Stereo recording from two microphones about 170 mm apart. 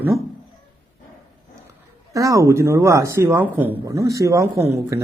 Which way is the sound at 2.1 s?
20° right (ahead or behind).